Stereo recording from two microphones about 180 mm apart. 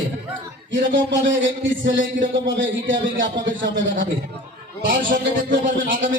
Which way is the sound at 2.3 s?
90° right.